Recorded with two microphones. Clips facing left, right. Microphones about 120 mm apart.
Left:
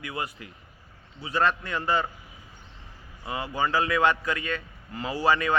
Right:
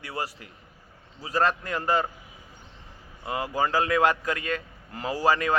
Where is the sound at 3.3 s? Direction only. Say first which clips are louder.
Right 1 dB; 45° right (ahead or behind).